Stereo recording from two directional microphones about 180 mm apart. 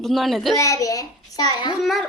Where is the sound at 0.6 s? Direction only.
15° left (ahead or behind).